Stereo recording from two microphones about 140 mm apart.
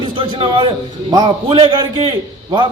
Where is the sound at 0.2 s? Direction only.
40° right (ahead or behind).